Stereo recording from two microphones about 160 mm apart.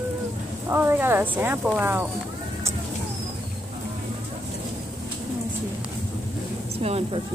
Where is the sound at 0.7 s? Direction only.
15° right (ahead or behind).